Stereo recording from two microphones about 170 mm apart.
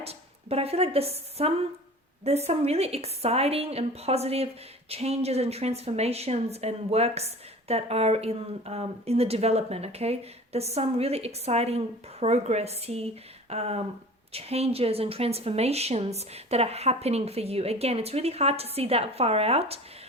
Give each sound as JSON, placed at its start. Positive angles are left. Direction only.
{"t": 0.0, "sound": "a woman's voice", "side_deg": -35}